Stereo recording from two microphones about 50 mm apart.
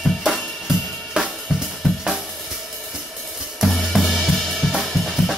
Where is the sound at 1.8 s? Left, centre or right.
Centre.